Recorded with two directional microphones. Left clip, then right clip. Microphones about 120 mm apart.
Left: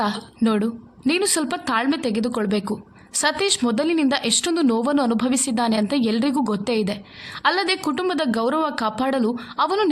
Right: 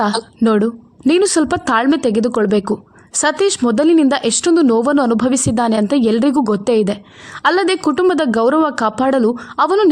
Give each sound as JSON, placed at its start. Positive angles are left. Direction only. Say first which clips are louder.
{"t": 0.0, "sound": "a woman's voice", "louder": "right 7 dB", "side_deg": -55}